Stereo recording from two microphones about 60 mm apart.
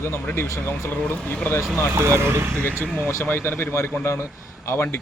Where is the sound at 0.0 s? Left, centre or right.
Left.